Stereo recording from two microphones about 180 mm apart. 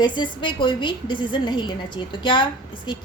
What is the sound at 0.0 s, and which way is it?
A woman's voice, 25° left (ahead or behind).